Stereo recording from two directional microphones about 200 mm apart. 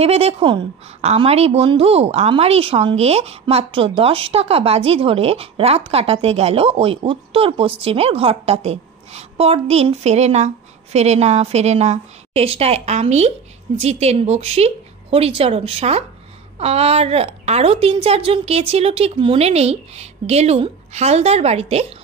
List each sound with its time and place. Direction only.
0.0 s a woman's voice: 30° right (ahead or behind)